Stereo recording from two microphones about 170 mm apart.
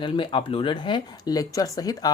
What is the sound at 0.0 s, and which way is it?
Speech, 30° left (ahead or behind).